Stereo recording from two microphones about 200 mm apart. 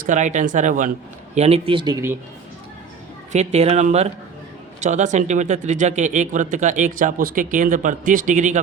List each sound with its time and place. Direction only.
0.0 s speech: 40° right (ahead or behind)
1.4 s speech: 30° right (ahead or behind)
3.3 s speech: 30° right (ahead or behind)